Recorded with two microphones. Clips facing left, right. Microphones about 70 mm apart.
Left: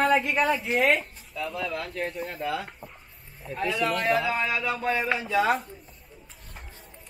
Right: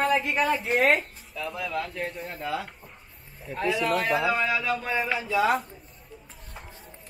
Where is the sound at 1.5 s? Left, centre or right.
Right.